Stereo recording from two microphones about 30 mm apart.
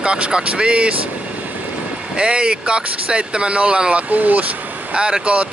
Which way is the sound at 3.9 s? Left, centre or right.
Right.